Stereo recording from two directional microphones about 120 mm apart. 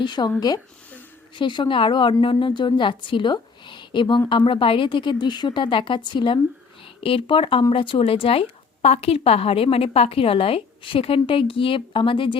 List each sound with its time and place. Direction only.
0.0 s a woman's voice: 40° left (ahead or behind)